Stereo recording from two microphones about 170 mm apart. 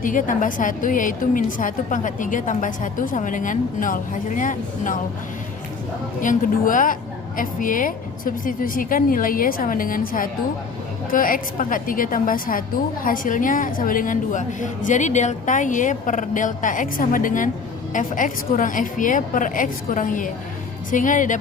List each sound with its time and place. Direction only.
0.0 s a woman's voice: 50° left (ahead or behind)
6.2 s a woman's voice: 50° left (ahead or behind)